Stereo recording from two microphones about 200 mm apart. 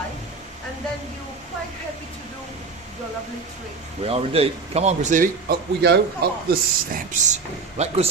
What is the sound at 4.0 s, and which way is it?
Speech, 30° right (ahead or behind).